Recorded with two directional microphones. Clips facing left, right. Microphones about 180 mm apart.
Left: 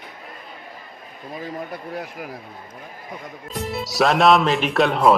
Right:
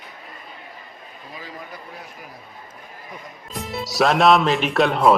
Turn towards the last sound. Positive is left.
turn(degrees=0)  # may be behind; listen again after turning